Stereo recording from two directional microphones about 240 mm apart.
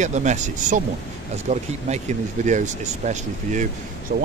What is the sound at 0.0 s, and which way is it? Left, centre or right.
Speech, right.